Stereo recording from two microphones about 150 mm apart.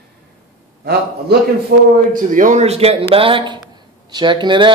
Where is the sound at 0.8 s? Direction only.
90° right.